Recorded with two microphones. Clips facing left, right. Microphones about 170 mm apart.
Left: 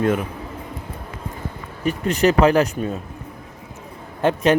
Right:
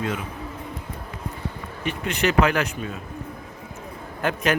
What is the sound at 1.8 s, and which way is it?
Speech, 40° left (ahead or behind).